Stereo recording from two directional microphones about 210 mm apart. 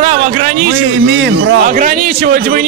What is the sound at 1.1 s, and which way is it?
Speech, 55° right (ahead or behind).